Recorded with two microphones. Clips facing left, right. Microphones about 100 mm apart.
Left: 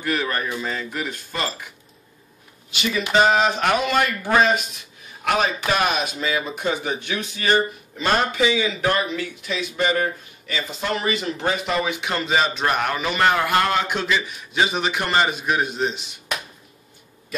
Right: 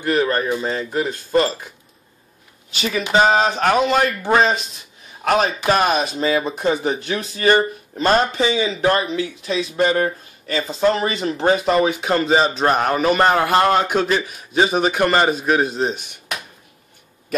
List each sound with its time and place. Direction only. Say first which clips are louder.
0.0 s speech: right 6 dB; 30° right (ahead or behind)
2.7 s speech: right 2 dB; 40° right (ahead or behind)
5.2 s a man's voice: right 4 dB; 40° right (ahead or behind)